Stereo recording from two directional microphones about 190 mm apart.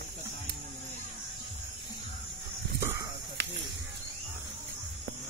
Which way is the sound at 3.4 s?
70° right (ahead or behind).